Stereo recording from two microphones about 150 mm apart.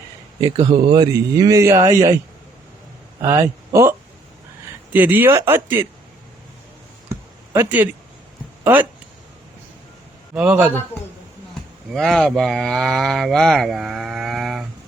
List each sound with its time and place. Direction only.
0.3 s speech: 35° right (ahead or behind)
3.2 s speech: 20° right (ahead or behind)
7.1 s a sound: 15° right (ahead or behind)
8.6 s speech: 10° right (ahead or behind)
10.3 s speech: 10° right (ahead or behind)
11.9 s speech: centre (ahead or behind)